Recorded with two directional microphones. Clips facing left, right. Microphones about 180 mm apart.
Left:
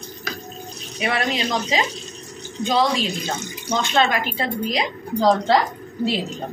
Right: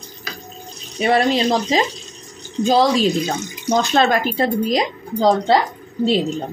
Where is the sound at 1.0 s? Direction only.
35° right (ahead or behind).